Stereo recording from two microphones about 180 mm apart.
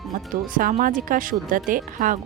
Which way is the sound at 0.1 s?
50° right (ahead or behind).